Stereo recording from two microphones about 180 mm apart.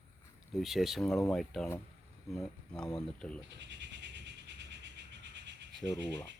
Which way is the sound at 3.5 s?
75° right (ahead or behind).